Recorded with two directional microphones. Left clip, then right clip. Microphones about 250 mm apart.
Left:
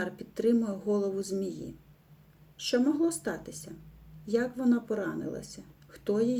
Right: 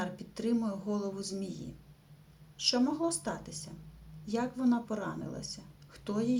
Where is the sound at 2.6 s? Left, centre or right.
Centre.